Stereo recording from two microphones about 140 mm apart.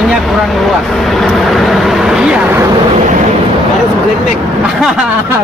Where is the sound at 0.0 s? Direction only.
Centre (ahead or behind).